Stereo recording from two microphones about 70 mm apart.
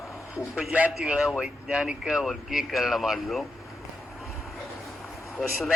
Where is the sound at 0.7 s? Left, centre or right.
Right.